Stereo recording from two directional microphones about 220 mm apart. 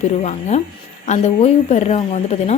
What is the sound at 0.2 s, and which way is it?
Speech, 30° left (ahead or behind).